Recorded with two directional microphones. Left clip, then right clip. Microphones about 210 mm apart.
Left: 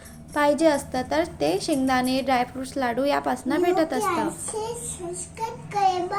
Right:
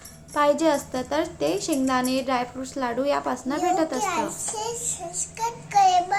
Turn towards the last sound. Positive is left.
turn(degrees=-40)  # may be behind; listen again after turning